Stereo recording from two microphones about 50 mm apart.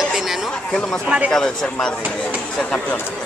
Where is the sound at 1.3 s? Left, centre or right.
Centre.